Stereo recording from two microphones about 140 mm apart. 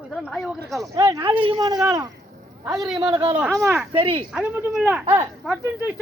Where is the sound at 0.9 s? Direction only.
25° right (ahead or behind).